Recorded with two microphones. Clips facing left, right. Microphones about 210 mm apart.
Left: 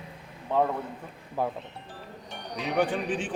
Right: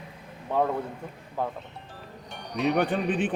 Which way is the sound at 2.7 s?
60° right (ahead or behind).